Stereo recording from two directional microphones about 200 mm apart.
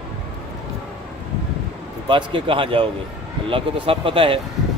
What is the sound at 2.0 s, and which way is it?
A man's voice, 25° right (ahead or behind).